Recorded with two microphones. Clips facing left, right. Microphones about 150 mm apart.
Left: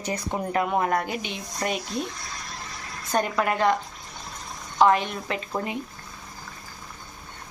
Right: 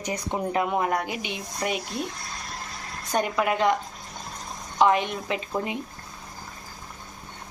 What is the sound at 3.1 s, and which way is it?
Speech, 10° right (ahead or behind).